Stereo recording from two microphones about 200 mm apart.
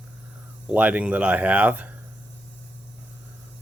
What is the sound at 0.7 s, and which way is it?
Speech, 5° right (ahead or behind).